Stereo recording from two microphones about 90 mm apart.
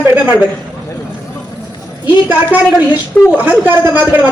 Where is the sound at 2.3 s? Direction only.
15° right (ahead or behind).